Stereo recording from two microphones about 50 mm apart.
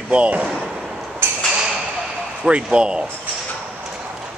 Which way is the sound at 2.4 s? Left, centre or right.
Centre.